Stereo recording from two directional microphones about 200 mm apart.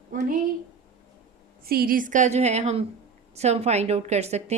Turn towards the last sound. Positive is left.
turn(degrees=-35)  # may be behind; listen again after turning